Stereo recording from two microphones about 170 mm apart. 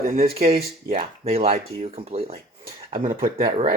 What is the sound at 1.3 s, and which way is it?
Speech, 35° right (ahead or behind).